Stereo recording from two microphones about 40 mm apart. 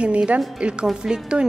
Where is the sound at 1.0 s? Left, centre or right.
Centre.